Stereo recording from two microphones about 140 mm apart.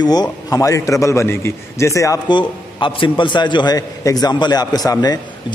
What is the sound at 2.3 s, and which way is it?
A man's voice, 35° left (ahead or behind).